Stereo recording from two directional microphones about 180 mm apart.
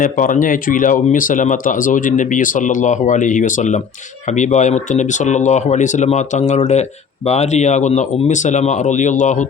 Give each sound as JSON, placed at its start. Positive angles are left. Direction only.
{"t": 0.0, "sound": "speech", "side_deg": 45}